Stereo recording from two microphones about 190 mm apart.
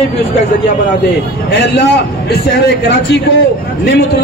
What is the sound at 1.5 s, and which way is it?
Speech, 65° left (ahead or behind).